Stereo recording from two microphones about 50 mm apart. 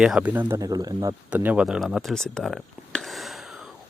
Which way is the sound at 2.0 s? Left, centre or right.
Centre.